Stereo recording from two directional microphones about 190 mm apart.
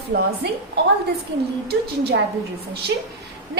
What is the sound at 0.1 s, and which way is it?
Speech, 55° right (ahead or behind).